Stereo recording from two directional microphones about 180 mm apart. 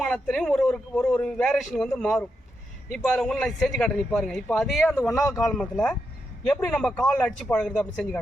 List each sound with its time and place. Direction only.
0.0 s a man's voice: 5° left (ahead or behind)
5.0 s speech: 20° left (ahead or behind)
5.3 s a man's voice: 5° left (ahead or behind)